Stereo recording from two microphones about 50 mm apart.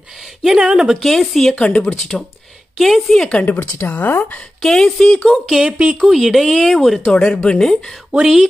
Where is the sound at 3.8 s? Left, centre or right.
Left.